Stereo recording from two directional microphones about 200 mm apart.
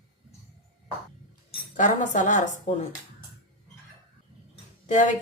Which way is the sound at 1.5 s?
40° left (ahead or behind).